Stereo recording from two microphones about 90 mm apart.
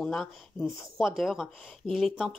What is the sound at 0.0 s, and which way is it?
A woman's voice, 5° left (ahead or behind).